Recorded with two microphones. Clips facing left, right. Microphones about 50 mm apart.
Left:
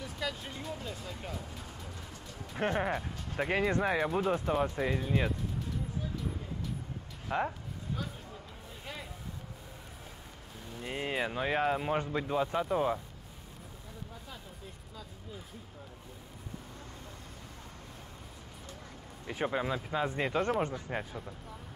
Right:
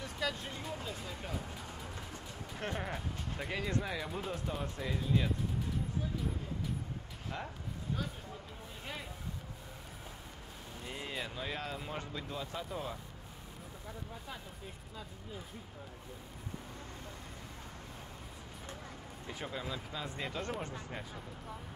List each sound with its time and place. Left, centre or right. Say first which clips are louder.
0.0 s speech: even; centre
2.5 s speech: left 8 dB; left
7.2 s speech: left 10 dB; left
10.8 s speech: left 8 dB; left
19.2 s speech: left 9 dB; left